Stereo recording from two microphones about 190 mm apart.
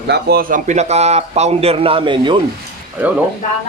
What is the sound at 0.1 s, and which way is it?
A man's voice, 55° right (ahead or behind).